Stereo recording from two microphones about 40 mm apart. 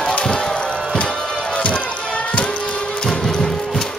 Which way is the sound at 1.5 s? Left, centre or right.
Left.